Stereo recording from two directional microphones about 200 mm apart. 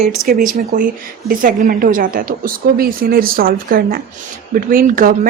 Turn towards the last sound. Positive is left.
turn(degrees=-45)  # may be behind; listen again after turning